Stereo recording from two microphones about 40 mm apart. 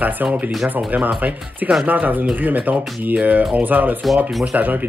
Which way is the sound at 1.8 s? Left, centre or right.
Right.